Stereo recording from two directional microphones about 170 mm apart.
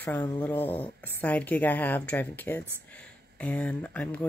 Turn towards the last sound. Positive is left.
turn(degrees=10)  # may be behind; listen again after turning